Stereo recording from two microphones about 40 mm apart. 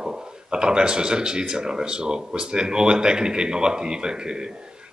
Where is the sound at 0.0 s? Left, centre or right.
Centre.